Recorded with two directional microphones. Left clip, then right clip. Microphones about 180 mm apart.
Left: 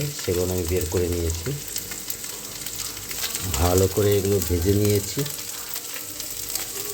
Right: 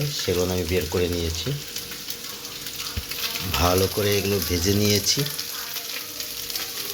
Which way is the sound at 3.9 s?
25° left (ahead or behind).